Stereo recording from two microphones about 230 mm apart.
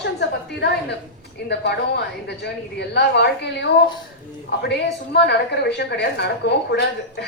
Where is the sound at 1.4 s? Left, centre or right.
Left.